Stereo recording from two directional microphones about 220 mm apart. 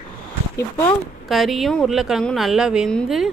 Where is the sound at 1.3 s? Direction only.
Centre (ahead or behind).